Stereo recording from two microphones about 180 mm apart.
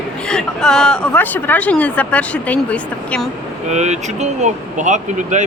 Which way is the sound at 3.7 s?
40° right (ahead or behind).